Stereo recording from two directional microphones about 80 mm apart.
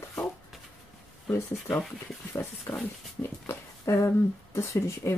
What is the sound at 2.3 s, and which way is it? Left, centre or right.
Speech, left.